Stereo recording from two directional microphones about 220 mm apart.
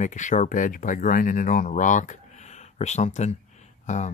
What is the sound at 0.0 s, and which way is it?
Speech, 35° left (ahead or behind).